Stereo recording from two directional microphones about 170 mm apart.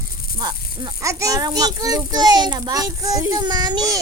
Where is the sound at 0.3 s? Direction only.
25° right (ahead or behind).